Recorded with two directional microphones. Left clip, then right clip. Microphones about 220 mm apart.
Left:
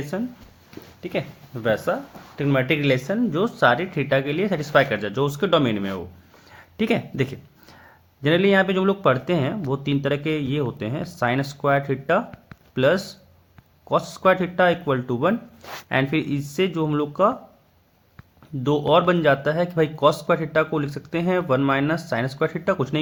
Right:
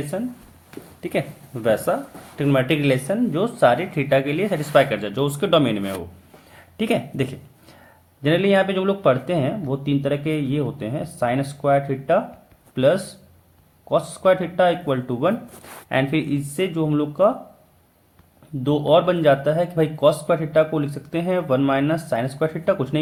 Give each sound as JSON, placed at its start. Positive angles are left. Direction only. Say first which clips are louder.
{"t": 0.1, "sound": "a man's voice", "louder": "right 1 dB", "side_deg": 40}
{"t": 1.0, "sound": "a man's voice", "louder": "right 3 dB", "side_deg": 10}
{"t": 6.5, "sound": "a sound", "louder": "right 1 dB", "side_deg": 35}
{"t": 8.2, "sound": "a man's voice", "louder": "even", "side_deg": 40}
{"t": 18.6, "sound": "a man's voice", "louder": "right 1 dB", "side_deg": 35}